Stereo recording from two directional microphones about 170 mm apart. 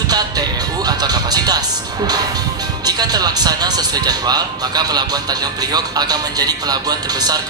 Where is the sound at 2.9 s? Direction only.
25° right (ahead or behind).